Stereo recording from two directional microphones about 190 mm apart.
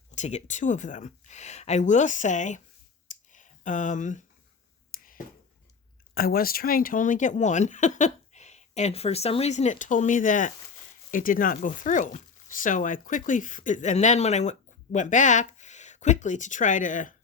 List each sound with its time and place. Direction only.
0.1 s speech: 35° left (ahead or behind)
3.1 s a sound: 40° left (ahead or behind)
6.1 s speech: 50° left (ahead or behind)